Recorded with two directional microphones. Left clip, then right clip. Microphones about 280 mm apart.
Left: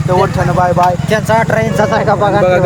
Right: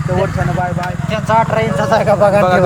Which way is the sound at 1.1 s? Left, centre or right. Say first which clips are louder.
Left 2 dB; left.